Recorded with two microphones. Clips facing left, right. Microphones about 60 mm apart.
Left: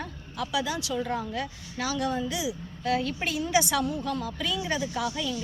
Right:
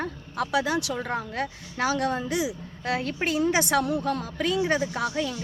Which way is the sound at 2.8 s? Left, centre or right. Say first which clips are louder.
Even; right.